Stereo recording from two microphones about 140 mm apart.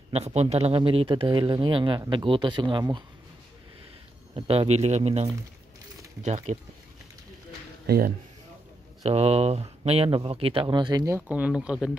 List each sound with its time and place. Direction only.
0.1 s speech: 50° right (ahead or behind); by 3.0 s 35° right (ahead or behind)
4.3 s speech: 45° right (ahead or behind)
7.8 s speech: 90° right
9.0 s speech: 45° right (ahead or behind); by 11.1 s 30° right (ahead or behind)
11.1 s speech: 10° right (ahead or behind)